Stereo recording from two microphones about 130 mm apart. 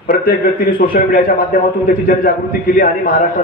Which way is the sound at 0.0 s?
90° left.